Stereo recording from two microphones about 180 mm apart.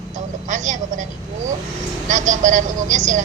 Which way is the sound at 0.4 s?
45° right (ahead or behind).